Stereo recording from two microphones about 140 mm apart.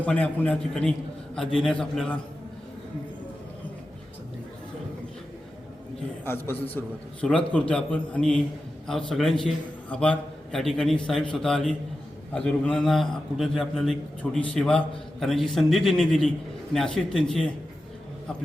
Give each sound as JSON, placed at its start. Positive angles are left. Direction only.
{"t": 0.0, "sound": "a man's voice", "side_deg": 10}
{"t": 6.2, "sound": "a man's voice", "side_deg": 15}